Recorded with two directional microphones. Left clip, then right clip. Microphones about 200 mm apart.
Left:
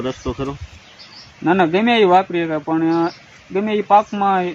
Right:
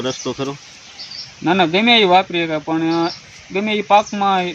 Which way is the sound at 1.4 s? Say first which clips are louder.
Right 1 dB; 5° right (ahead or behind).